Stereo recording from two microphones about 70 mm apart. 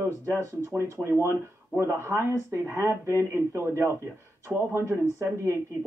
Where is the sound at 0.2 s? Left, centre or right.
Right.